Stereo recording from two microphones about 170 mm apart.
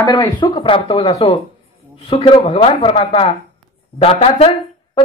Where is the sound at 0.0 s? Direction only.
20° left (ahead or behind).